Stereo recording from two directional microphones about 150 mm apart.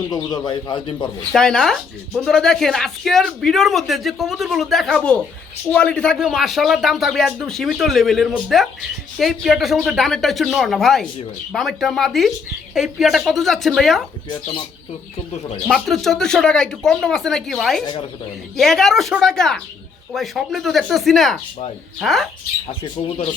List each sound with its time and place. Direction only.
0.1 s speech: 25° left (ahead or behind)
1.3 s speech: 5° left (ahead or behind)
15.6 s speech: centre (ahead or behind)
22.8 s speech: 40° left (ahead or behind)